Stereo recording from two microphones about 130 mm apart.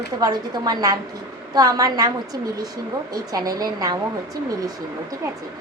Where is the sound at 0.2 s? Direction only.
30° right (ahead or behind).